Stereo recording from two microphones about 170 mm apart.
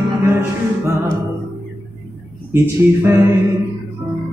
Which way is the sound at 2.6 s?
15° right (ahead or behind).